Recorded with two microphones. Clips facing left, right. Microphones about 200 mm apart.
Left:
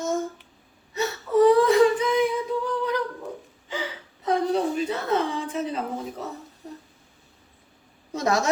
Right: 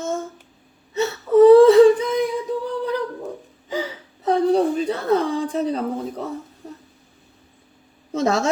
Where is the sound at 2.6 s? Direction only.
35° right (ahead or behind).